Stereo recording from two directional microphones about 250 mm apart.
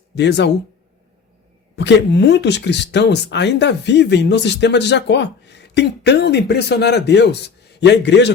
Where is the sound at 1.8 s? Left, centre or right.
Left.